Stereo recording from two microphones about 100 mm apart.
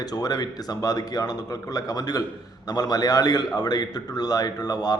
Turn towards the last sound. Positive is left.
turn(degrees=40)  # may be behind; listen again after turning